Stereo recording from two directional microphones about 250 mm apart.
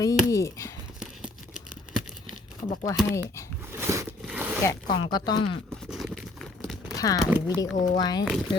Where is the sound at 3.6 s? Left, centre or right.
Centre.